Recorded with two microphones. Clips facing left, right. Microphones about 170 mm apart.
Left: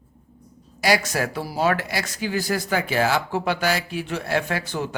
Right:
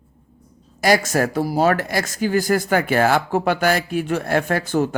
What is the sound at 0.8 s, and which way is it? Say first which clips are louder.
Speech: right 4 dB; 45° right (ahead or behind).